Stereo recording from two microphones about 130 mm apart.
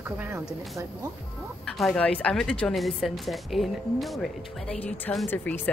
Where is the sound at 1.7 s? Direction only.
5° left (ahead or behind).